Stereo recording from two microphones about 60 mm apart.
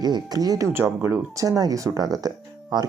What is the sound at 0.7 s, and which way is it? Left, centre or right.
Speech, right.